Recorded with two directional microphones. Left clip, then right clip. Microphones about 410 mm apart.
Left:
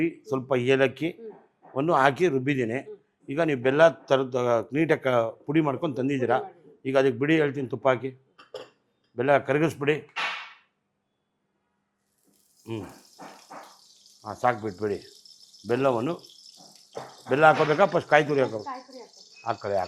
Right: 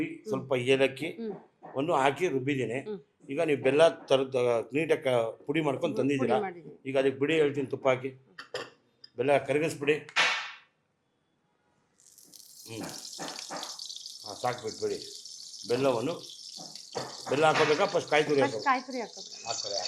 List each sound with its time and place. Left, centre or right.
0.0 s a man's voice: left
9.1 s speech: left
14.2 s speech: left
17.2 s speech: left
18.6 s speech: right